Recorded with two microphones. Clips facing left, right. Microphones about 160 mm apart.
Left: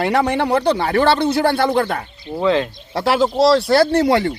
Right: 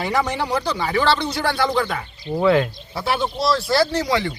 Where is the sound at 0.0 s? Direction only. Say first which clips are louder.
Left 5 dB; 60° left (ahead or behind).